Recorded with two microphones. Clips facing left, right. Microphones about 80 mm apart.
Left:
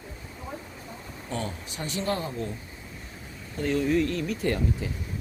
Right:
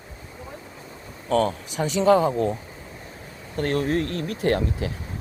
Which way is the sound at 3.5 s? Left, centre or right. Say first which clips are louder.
Right 1 dB; right.